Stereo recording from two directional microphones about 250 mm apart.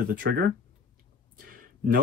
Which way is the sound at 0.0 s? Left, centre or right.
Right.